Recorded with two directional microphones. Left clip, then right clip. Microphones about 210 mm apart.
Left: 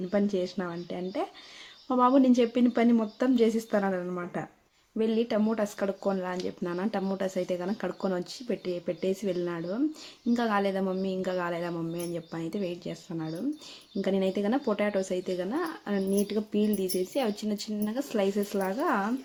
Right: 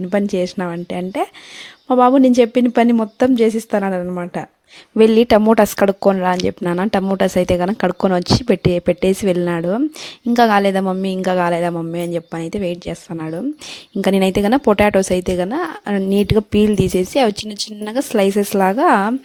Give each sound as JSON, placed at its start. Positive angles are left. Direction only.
{"t": 0.1, "sound": "a woman's voice", "side_deg": -45}